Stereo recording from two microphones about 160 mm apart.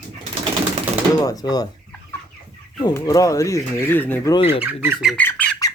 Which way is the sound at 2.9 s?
20° left (ahead or behind).